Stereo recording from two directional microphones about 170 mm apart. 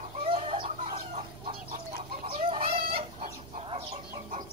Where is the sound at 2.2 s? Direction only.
35° right (ahead or behind).